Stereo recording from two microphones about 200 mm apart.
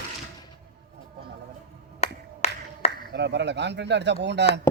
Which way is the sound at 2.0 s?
30° left (ahead or behind).